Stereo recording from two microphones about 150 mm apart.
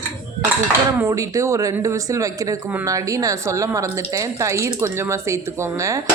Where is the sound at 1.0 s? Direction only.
20° right (ahead or behind).